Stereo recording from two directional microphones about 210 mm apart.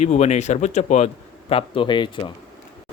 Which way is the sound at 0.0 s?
30° left (ahead or behind).